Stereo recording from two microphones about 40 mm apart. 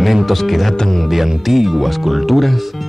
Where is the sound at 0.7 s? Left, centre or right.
Centre.